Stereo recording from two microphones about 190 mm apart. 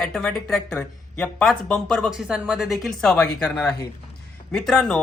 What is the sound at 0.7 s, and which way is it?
Speech, 10° left (ahead or behind).